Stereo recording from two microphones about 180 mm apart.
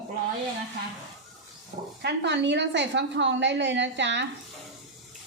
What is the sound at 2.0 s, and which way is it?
A woman's voice, 70° right (ahead or behind).